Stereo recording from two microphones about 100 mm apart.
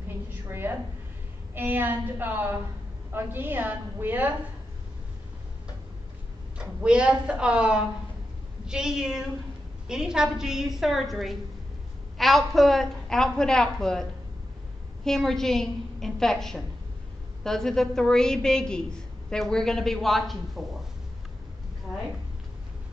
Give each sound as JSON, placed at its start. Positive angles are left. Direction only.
{"t": 0.3, "sound": "a woman's voice", "side_deg": -20}
{"t": 6.6, "sound": "a woman's voice", "side_deg": -10}
{"t": 15.0, "sound": "a woman's voice", "side_deg": 5}